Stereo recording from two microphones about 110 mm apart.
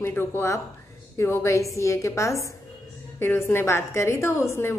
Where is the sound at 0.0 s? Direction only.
20° left (ahead or behind).